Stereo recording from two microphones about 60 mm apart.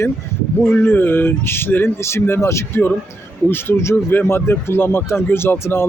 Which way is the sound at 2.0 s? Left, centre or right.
Left.